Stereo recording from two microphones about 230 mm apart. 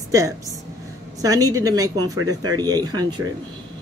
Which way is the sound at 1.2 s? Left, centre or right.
Centre.